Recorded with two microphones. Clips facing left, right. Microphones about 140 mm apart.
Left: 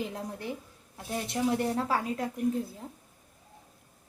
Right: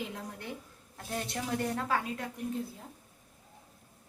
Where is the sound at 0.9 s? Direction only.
15° left (ahead or behind); by 2.3 s 35° left (ahead or behind).